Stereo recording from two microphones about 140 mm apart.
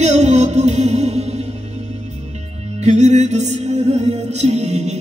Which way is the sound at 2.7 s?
55° right (ahead or behind).